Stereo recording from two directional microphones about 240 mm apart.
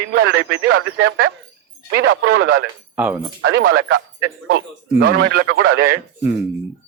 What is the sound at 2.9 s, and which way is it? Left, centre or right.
Speech, centre.